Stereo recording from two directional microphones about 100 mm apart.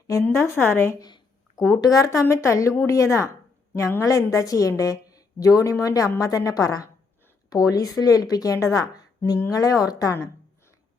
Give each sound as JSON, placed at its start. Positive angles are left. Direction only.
{"t": 0.1, "sound": "a woman's voice", "side_deg": 30}
{"t": 0.9, "sound": "a sound", "side_deg": 40}
{"t": 1.8, "sound": "a woman's voice", "side_deg": 35}